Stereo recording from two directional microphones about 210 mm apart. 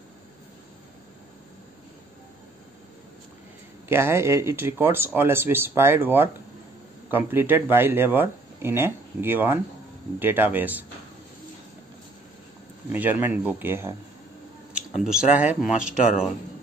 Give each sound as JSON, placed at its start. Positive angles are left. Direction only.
{"t": 3.9, "sound": "speech", "side_deg": -10}
{"t": 12.9, "sound": "speech", "side_deg": -10}
{"t": 14.7, "sound": "a sound", "side_deg": -5}
{"t": 15.3, "sound": "speech", "side_deg": -5}